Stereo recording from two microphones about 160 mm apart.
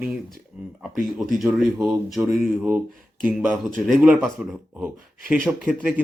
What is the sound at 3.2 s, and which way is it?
Speech, centre (ahead or behind).